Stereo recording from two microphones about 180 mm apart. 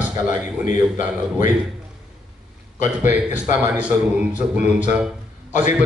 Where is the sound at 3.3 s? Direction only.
10° right (ahead or behind).